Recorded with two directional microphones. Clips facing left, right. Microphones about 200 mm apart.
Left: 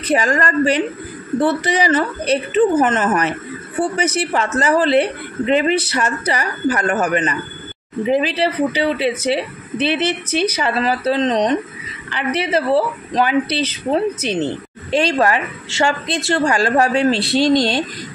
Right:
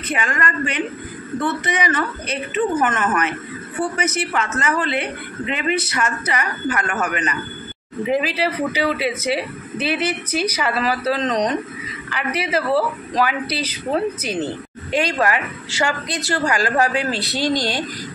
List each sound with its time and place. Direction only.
0.1 s a woman's voice: 35° left (ahead or behind)
14.9 s a woman's voice: 30° left (ahead or behind)